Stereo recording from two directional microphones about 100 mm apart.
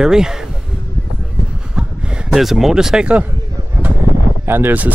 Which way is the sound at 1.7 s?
10° right (ahead or behind).